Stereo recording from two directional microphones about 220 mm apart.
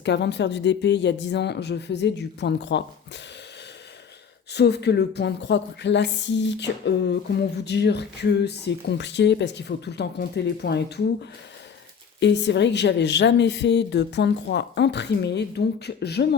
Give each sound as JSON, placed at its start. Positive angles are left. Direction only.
{"t": 0.0, "sound": "speech", "side_deg": 50}
{"t": 4.5, "sound": "speech", "side_deg": 50}